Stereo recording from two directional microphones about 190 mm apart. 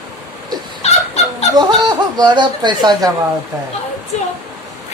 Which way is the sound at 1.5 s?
20° right (ahead or behind).